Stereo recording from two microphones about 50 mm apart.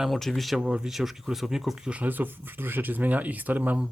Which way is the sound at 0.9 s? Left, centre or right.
Centre.